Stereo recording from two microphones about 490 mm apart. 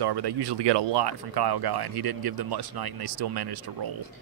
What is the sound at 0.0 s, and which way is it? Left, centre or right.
Speech, right.